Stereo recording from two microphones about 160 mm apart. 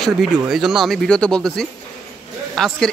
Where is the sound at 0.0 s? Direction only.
Centre (ahead or behind).